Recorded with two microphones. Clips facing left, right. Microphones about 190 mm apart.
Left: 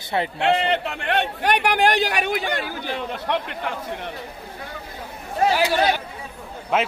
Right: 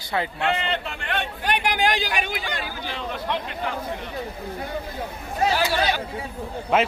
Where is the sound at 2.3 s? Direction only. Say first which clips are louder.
Left 5 dB; 55° left (ahead or behind).